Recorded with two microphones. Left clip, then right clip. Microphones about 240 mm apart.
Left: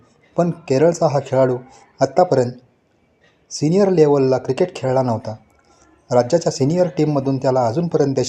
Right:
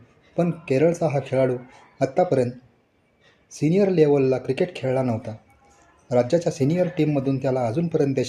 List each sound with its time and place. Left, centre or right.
0.3 s speech: centre
3.5 s speech: centre